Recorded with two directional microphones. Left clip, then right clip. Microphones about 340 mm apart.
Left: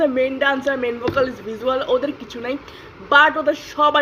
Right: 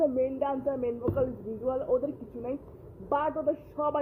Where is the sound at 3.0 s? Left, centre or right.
Left.